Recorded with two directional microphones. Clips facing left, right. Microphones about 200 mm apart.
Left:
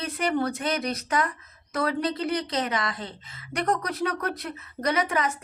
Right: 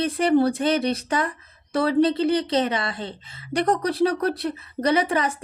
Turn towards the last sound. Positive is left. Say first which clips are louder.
# right 4 dB
turn(degrees=-30)  # may be behind; listen again after turning